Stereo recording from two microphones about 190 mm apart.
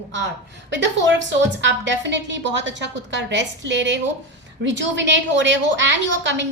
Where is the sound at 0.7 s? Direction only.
70° right (ahead or behind).